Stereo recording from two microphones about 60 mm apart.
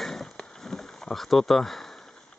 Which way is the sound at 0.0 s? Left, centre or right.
Centre.